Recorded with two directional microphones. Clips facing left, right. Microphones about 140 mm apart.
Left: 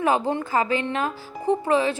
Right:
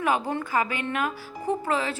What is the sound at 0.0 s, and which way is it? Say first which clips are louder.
A woman's voice: left 4 dB; 25° left (ahead or behind).